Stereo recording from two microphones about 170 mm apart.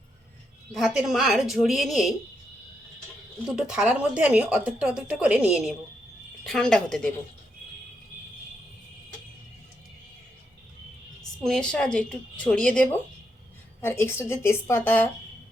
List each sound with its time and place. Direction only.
0.7 s speech: centre (ahead or behind)
3.4 s speech: 5° right (ahead or behind)
11.4 s a woman's voice: 5° left (ahead or behind)